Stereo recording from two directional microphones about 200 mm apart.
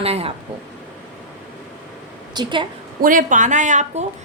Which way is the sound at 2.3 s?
20° right (ahead or behind).